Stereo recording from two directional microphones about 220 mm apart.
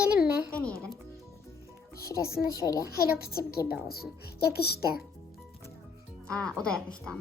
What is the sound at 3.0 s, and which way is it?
Speech, 45° left (ahead or behind).